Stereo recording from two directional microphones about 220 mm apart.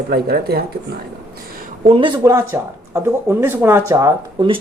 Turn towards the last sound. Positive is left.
turn(degrees=-20)  # may be behind; listen again after turning